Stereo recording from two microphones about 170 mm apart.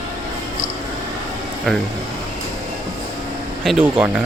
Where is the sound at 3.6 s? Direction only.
5° right (ahead or behind).